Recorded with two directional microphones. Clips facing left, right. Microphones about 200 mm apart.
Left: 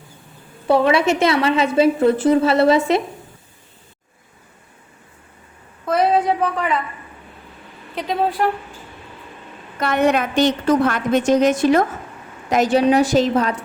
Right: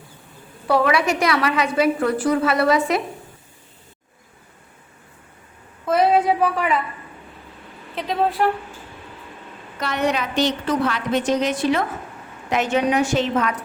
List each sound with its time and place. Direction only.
0.7 s a woman's voice: 25° left (ahead or behind)
5.8 s a sound: centre (ahead or behind)
7.9 s a woman's voice: centre (ahead or behind)
9.8 s a woman's voice: 50° left (ahead or behind); by 13.6 s 35° left (ahead or behind)